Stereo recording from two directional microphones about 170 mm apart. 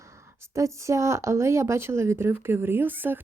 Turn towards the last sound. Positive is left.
turn(degrees=-10)  # may be behind; listen again after turning